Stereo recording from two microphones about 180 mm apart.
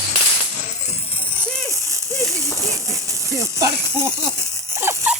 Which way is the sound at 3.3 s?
15° right (ahead or behind).